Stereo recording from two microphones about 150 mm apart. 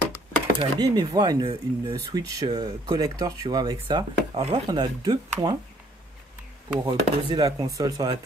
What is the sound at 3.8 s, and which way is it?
Chopping, 30° right (ahead or behind).